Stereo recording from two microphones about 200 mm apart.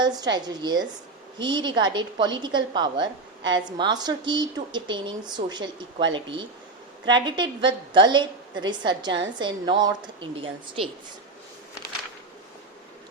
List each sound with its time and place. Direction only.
0.0 s a woman's voice: 20° right (ahead or behind)
7.1 s a woman's voice: 25° right (ahead or behind)